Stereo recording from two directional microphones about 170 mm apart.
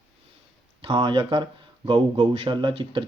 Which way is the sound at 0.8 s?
30° right (ahead or behind).